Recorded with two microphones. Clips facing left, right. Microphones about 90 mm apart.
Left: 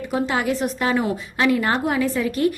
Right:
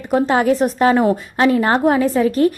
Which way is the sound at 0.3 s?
40° right (ahead or behind).